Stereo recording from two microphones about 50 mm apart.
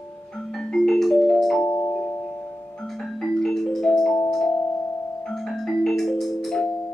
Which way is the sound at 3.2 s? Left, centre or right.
Centre.